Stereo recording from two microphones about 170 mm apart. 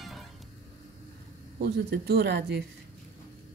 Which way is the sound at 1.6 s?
70° right (ahead or behind).